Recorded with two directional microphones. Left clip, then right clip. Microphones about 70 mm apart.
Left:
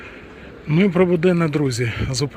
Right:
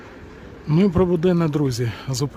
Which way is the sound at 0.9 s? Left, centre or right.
Centre.